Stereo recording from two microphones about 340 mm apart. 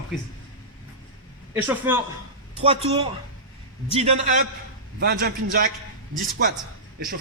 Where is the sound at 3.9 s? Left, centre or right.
Centre.